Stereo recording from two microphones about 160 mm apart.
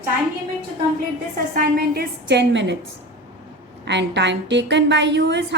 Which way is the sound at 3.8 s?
90° right.